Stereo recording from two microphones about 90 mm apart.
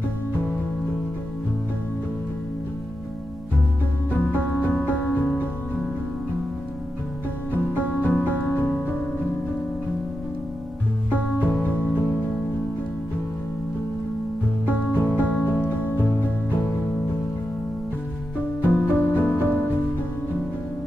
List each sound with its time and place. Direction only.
4.1 s music: 20° left (ahead or behind)
7.7 s music: 20° left (ahead or behind)
11.1 s music: 20° left (ahead or behind)
14.7 s music: 20° left (ahead or behind)
18.7 s music: 20° left (ahead or behind)